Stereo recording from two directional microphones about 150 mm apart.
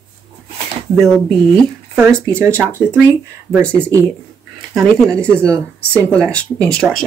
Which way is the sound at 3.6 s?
5° left (ahead or behind).